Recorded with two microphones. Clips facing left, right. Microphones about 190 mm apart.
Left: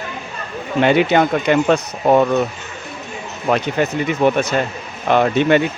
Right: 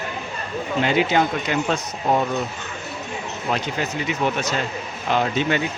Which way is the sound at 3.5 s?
55° left (ahead or behind).